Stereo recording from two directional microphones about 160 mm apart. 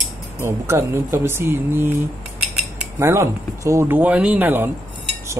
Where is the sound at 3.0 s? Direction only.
20° right (ahead or behind).